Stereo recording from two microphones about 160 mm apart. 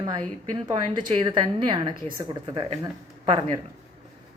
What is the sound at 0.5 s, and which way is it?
Speech, 30° right (ahead or behind).